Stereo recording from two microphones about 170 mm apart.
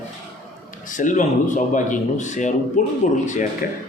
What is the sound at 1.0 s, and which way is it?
A man's voice, 50° left (ahead or behind).